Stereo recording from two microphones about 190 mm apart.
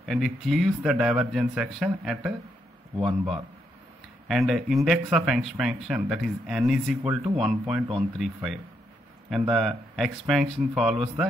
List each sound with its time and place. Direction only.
0.0 s speech: centre (ahead or behind)